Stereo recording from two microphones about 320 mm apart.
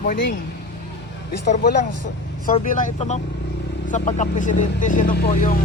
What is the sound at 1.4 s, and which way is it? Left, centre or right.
Speech, left.